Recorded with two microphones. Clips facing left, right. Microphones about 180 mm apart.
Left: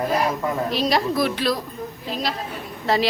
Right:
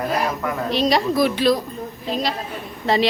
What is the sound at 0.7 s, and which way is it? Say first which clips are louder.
Speech: right 5 dB; centre (ahead or behind).